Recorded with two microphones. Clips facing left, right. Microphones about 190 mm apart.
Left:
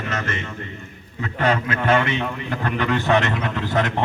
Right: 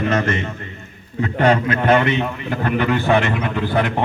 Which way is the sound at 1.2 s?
30° right (ahead or behind).